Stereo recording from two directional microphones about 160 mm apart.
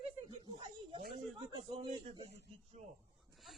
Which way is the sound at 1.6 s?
30° right (ahead or behind).